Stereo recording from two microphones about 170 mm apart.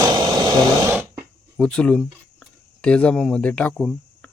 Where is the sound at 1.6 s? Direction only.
5° left (ahead or behind).